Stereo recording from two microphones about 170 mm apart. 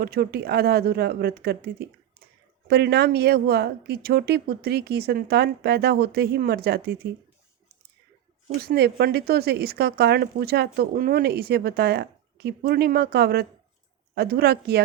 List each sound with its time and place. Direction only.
0.0 s speech: 65° right (ahead or behind)
8.6 s speech: 70° right (ahead or behind)